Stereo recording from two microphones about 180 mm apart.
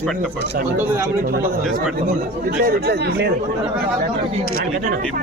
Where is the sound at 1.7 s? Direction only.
55° right (ahead or behind).